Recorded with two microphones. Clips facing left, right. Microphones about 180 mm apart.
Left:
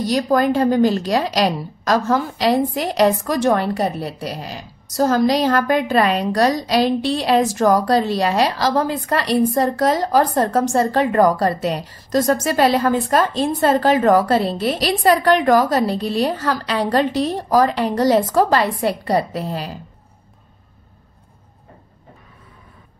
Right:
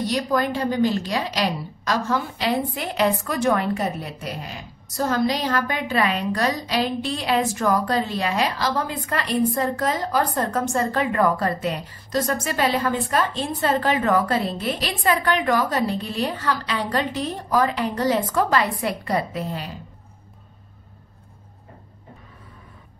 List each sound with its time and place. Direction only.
0.1 s a woman's voice: 40° left (ahead or behind)